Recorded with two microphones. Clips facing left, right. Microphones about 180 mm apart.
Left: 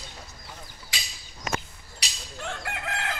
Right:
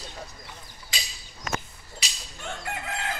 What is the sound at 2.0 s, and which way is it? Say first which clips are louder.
Fowl: even; 70° left (ahead or behind).